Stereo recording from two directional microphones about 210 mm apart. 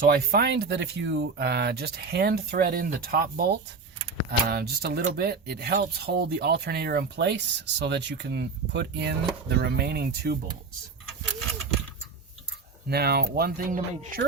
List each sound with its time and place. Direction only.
0.1 s speech: 45° right (ahead or behind)
12.9 s speech: 50° right (ahead or behind)